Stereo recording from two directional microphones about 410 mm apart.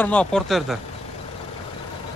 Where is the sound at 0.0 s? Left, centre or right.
Centre.